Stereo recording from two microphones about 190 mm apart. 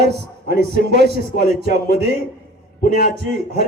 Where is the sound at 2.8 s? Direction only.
45° left (ahead or behind).